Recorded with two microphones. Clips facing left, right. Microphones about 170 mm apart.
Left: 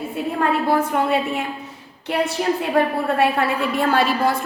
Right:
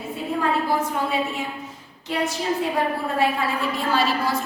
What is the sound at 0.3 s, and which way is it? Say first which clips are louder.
A woman's voice: left 3 dB; 60° left (ahead or behind).